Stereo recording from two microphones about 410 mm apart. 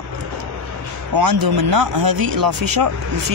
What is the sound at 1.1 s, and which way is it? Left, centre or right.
Speech, right.